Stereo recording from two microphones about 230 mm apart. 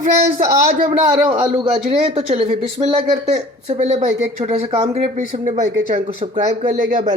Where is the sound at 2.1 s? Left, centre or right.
Right.